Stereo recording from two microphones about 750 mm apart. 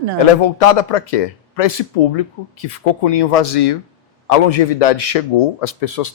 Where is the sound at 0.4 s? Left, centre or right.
Left.